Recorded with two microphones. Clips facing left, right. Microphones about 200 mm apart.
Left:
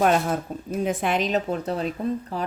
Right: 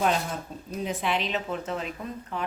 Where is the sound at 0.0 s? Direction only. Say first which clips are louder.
Left 6 dB; 55° left (ahead or behind).